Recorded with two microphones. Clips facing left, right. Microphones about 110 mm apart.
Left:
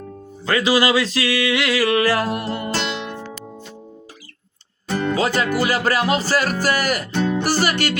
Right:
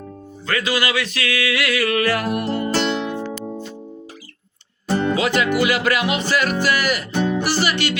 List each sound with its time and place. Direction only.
0.4 s music: 25° left (ahead or behind)
2.7 s music: 40° right (ahead or behind)
3.1 s music: 5° right (ahead or behind)
3.3 s music: 20° right (ahead or behind)
4.9 s music: 20° right (ahead or behind)
5.1 s music: 35° left (ahead or behind)
7.1 s music: 10° right (ahead or behind)
7.4 s music: 45° left (ahead or behind)